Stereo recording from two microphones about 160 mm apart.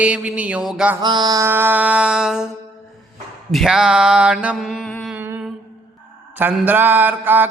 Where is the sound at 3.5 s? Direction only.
Centre (ahead or behind).